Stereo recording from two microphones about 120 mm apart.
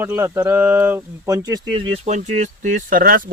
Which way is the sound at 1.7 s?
45° right (ahead or behind).